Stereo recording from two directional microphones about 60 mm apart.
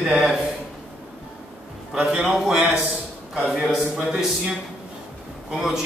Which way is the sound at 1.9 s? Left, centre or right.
Centre.